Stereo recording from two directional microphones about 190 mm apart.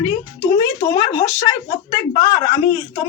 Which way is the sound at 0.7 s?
20° left (ahead or behind).